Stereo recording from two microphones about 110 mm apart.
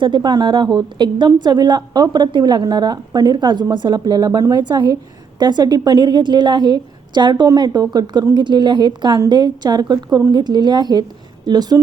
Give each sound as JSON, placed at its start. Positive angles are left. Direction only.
{"t": 0.0, "sound": "a woman's voice", "side_deg": -45}